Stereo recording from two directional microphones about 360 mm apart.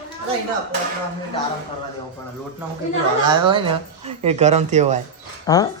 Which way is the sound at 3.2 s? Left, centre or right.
Centre.